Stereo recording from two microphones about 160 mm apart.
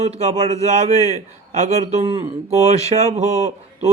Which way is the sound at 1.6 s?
40° right (ahead or behind).